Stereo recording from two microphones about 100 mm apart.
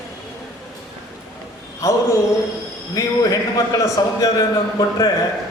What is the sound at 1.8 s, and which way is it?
A man's voice, 35° left (ahead or behind).